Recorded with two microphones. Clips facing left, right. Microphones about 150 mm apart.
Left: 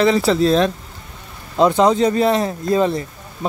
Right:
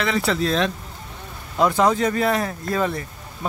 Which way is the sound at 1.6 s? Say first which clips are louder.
Left 4 dB; 20° left (ahead or behind).